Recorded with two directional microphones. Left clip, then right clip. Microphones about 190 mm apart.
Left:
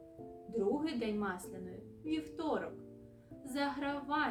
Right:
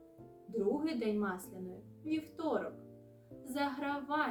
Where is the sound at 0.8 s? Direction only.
5° left (ahead or behind).